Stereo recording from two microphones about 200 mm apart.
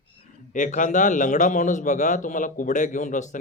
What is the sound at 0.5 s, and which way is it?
A man's voice, 40° left (ahead or behind).